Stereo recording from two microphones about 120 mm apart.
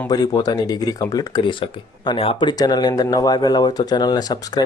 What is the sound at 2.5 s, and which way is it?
Speech, 35° left (ahead or behind).